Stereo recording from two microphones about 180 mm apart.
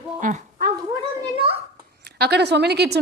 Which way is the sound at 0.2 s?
45° right (ahead or behind).